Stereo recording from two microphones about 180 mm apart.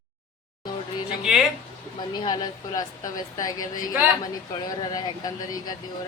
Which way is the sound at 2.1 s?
25° left (ahead or behind).